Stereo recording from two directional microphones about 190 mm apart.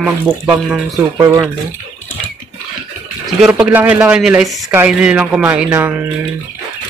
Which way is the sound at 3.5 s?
10° right (ahead or behind).